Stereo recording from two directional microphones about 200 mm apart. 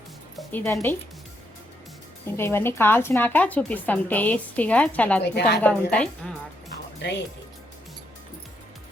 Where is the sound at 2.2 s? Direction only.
10° left (ahead or behind).